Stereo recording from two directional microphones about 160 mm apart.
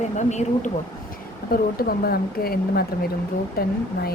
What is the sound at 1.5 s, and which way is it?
Speech, 70° left (ahead or behind).